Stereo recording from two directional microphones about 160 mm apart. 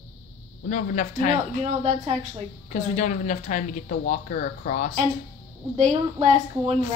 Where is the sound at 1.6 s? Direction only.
40° right (ahead or behind).